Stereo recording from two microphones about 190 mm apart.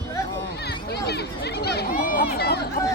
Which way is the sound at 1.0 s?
60° left (ahead or behind).